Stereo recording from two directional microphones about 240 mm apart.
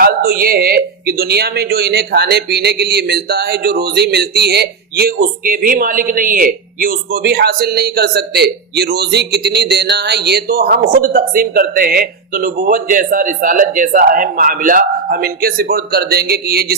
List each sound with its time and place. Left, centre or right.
0.0 s a woman's voice: right